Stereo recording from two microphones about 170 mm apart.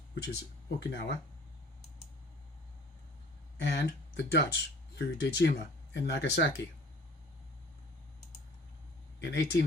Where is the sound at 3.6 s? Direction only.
85° left.